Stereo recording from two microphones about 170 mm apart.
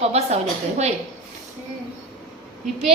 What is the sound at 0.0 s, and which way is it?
Speech, 35° right (ahead or behind).